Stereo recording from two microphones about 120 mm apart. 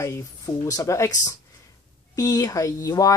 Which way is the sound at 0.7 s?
25° left (ahead or behind).